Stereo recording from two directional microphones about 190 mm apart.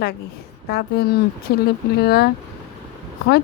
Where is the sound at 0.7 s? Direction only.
60° left (ahead or behind).